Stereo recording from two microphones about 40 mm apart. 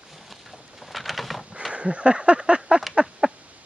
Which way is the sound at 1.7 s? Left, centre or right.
Right.